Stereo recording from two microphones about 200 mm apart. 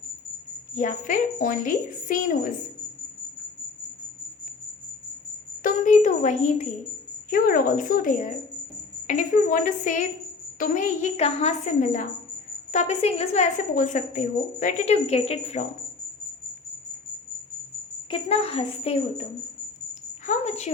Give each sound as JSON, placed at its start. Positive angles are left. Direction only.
{"t": 0.8, "sound": "a woman's voice", "side_deg": 40}
{"t": 5.6, "sound": "a woman's voice", "side_deg": 40}
{"t": 7.3, "sound": "a woman's voice", "side_deg": 45}
{"t": 18.1, "sound": "a woman's voice", "side_deg": 30}
{"t": 20.2, "sound": "a woman's voice", "side_deg": 35}